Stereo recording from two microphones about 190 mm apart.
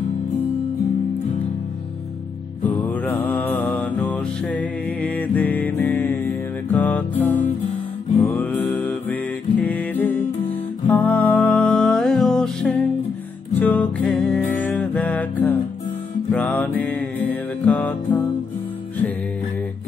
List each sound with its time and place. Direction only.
2.7 s mantra: 10° left (ahead or behind)
8.2 s music: 10° left (ahead or behind)